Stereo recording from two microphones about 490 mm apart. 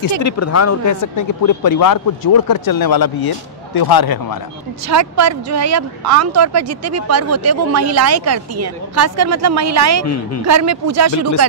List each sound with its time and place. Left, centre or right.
0.2 s a man's voice: left
4.8 s speech: right
10.0 s a man's voice: left
10.4 s speech: right